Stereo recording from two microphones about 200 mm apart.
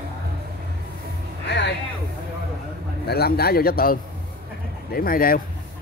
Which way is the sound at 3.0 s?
50° left (ahead or behind).